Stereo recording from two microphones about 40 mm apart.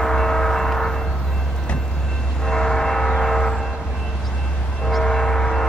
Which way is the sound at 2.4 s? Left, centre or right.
Centre.